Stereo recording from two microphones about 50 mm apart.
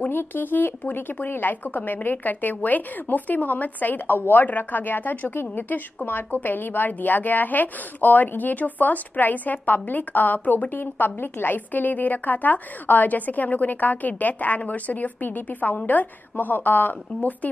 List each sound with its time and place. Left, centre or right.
0.1 s a woman's voice: left